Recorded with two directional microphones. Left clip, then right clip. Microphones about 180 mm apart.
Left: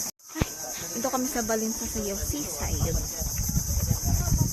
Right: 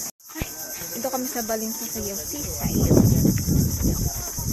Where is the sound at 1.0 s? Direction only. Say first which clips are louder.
Right 1 dB; 15° left (ahead or behind).